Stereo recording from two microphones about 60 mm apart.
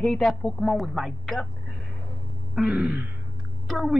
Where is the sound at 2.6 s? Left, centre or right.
Centre.